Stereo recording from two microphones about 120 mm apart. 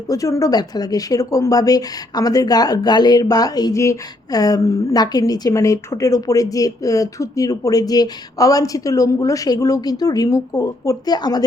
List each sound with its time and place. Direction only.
0.1 s speech: 30° left (ahead or behind)